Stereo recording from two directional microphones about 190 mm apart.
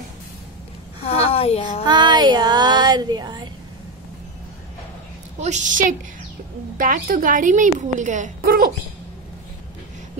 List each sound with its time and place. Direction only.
1.0 s a sound: 30° left (ahead or behind)
1.9 s child singing: 25° right (ahead or behind)
5.4 s a woman's voice: 40° right (ahead or behind)